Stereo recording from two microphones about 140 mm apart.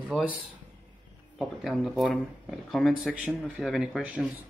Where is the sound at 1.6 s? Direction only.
Centre (ahead or behind).